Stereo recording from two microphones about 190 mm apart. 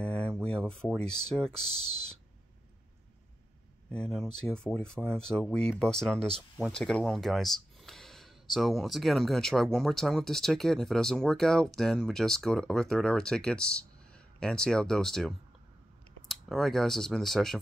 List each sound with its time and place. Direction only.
0.0 s a sound: 5° left (ahead or behind)
0.7 s speech: 5° left (ahead or behind)
3.9 s speech: centre (ahead or behind)